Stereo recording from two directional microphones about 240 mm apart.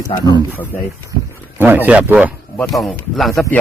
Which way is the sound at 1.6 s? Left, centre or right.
Centre.